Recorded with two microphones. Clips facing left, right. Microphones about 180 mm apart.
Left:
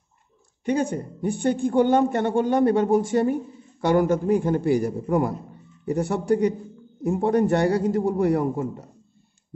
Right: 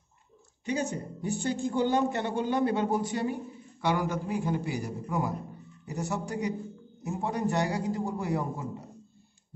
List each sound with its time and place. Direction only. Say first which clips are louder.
0.7 s a man's voice: left 7 dB; 55° left (ahead or behind)